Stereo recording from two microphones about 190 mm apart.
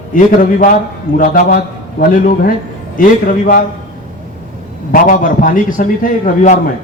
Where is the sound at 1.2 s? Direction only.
50° left (ahead or behind).